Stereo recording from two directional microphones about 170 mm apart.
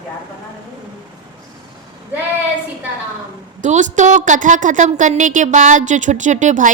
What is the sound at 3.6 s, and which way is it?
A woman's voice, 45° right (ahead or behind).